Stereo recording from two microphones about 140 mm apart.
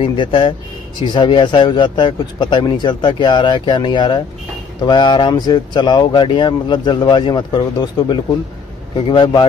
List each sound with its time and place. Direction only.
0.0 s speech: 40° left (ahead or behind)